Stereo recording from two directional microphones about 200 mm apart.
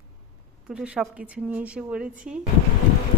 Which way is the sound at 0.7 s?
5° right (ahead or behind).